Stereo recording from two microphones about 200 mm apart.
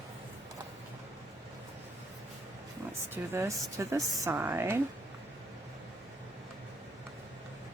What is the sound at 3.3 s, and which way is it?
Speech, 15° right (ahead or behind).